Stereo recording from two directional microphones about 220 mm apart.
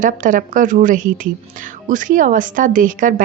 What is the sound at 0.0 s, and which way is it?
A woman's voice, 35° right (ahead or behind).